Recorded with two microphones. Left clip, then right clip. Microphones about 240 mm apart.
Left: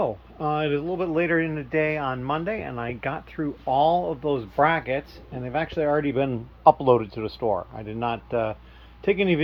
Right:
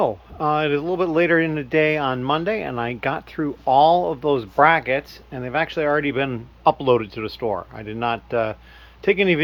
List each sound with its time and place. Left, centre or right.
0.0 s speech: centre